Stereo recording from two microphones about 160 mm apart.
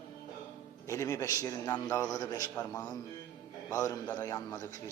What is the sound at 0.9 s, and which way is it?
A man's voice, 20° left (ahead or behind).